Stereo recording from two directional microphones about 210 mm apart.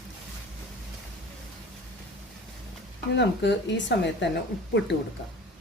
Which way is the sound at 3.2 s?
55° left (ahead or behind).